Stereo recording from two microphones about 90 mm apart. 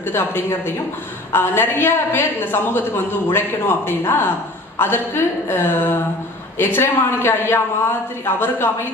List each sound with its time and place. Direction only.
0.0 s a woman's voice: 25° left (ahead or behind)